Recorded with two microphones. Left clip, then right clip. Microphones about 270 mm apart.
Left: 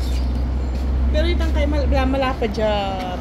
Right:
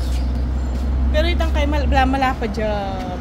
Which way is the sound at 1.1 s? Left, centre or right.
Right.